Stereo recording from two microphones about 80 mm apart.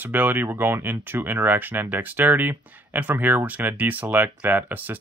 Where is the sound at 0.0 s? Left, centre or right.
Right.